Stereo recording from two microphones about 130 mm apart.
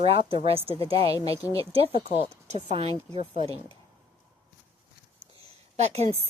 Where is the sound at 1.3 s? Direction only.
25° left (ahead or behind).